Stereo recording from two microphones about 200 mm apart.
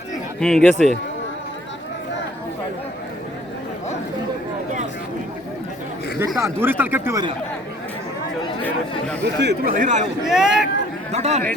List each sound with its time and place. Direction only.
0.3 s speech: 5° left (ahead or behind)
6.1 s speech: 15° right (ahead or behind)
9.4 s speech: 50° right (ahead or behind)
10.2 s speech: centre (ahead or behind)
11.1 s speech: 35° right (ahead or behind)